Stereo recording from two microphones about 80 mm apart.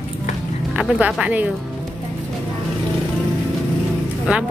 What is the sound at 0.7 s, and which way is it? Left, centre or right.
Speech, centre.